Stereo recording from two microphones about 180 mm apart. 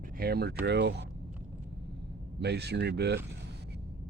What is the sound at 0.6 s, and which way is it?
Speech, 70° right (ahead or behind).